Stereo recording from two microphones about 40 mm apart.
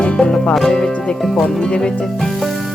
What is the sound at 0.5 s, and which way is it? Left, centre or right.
Speech, centre.